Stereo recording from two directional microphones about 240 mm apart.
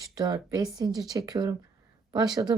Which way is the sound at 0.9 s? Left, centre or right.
Centre.